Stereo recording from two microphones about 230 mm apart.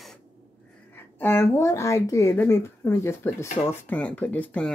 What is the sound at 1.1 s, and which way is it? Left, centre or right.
Speech, centre.